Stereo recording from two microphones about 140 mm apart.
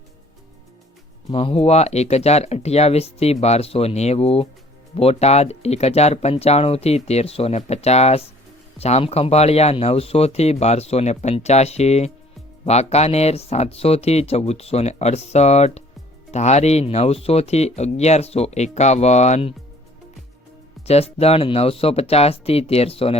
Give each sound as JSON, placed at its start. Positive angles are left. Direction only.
{"t": 1.3, "sound": "speech", "side_deg": 40}
{"t": 20.8, "sound": "speech", "side_deg": 45}